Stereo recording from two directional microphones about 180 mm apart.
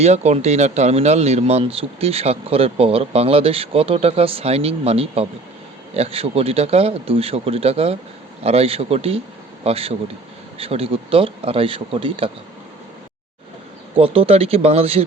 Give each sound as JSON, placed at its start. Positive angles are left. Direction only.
{"t": 0.0, "sound": "speech", "side_deg": -35}
{"t": 13.9, "sound": "speech", "side_deg": -30}